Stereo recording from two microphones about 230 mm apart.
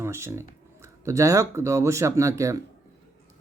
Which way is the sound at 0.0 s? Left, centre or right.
Centre.